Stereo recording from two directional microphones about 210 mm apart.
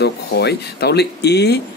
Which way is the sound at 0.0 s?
50° left (ahead or behind).